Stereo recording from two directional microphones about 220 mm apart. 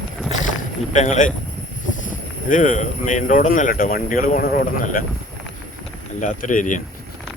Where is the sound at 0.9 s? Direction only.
35° left (ahead or behind).